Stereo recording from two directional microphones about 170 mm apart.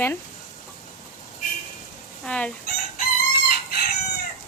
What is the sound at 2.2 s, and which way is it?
Fowl, 5° left (ahead or behind).